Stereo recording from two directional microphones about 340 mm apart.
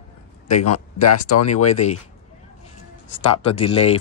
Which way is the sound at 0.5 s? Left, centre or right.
Left.